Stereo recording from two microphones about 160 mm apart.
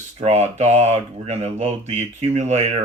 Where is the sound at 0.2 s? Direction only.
45° right (ahead or behind).